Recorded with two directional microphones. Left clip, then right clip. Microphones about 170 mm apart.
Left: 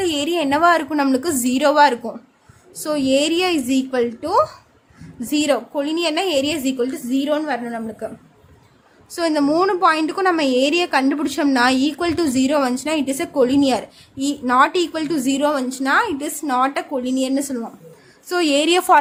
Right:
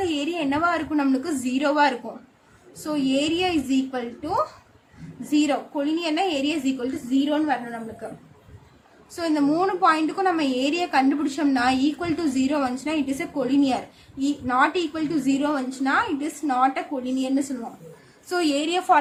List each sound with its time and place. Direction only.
0.0 s a woman's voice: 90° left
9.1 s a woman's voice: 75° left (ahead or behind)
18.3 s a woman's voice: 65° left (ahead or behind); by 18.9 s 80° left